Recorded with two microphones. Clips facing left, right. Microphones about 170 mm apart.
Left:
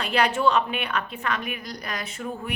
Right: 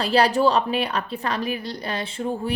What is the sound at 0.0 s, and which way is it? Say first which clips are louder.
A woman's voice: right 4 dB; 35° right (ahead or behind).